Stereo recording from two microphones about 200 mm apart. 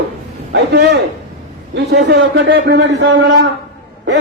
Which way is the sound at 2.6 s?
55° right (ahead or behind).